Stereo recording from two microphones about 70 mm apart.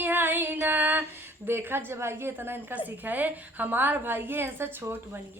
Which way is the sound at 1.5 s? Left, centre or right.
Right.